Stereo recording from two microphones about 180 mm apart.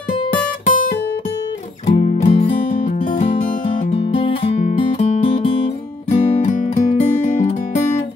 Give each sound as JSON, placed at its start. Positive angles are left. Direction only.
{"t": 0.7, "sound": "music", "side_deg": 45}
{"t": 1.9, "sound": "music", "side_deg": 35}